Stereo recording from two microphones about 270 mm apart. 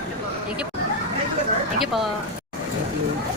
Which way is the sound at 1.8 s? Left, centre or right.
Centre.